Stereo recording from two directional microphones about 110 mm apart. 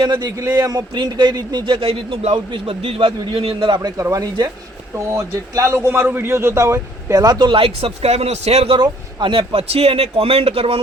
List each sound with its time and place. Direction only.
0.0 s a man's voice: 45° right (ahead or behind)
3.8 s a man's voice: 30° right (ahead or behind)
7.2 s speech: 40° right (ahead or behind); by 8.8 s 65° right (ahead or behind)
8.8 s speech: 45° right (ahead or behind); by 10.8 s 60° right (ahead or behind)